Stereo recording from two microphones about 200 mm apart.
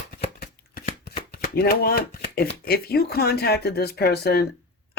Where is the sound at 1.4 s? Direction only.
50° left (ahead or behind).